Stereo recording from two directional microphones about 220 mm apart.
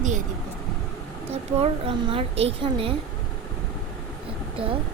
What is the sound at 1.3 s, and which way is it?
A woman's voice, 25° right (ahead or behind).